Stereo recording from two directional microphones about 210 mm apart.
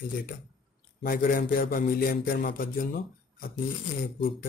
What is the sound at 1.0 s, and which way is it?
A man's voice, 40° left (ahead or behind).